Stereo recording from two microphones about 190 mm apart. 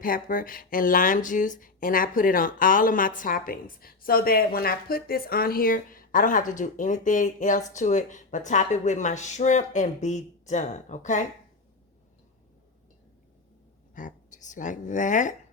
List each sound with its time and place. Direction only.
0.0 s speech: 45° left (ahead or behind)
13.9 s speech: 40° left (ahead or behind)